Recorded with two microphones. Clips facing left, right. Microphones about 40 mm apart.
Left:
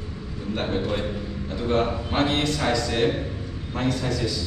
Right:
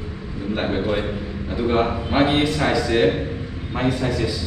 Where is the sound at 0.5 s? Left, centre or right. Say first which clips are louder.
Right 4 dB; centre.